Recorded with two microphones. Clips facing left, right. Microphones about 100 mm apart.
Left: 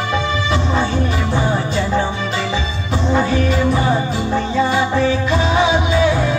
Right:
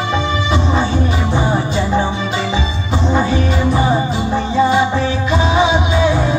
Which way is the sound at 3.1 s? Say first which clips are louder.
Even; 15° right (ahead or behind).